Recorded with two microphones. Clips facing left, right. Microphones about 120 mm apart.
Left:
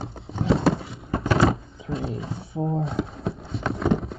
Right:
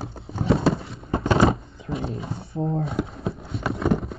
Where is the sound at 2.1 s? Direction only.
Centre (ahead or behind).